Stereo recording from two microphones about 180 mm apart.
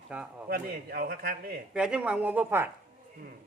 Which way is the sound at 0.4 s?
55° right (ahead or behind).